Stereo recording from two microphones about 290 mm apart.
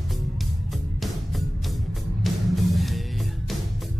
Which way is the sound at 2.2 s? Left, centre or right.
Centre.